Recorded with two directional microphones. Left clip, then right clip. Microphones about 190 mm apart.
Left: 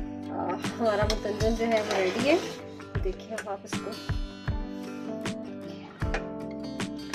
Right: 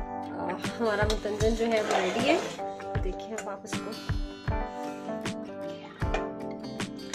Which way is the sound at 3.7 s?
Centre (ahead or behind).